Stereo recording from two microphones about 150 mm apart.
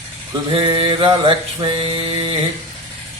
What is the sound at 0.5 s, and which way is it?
Mantra, 35° right (ahead or behind).